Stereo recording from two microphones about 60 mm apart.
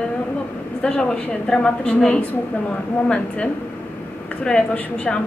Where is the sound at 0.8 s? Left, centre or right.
Centre.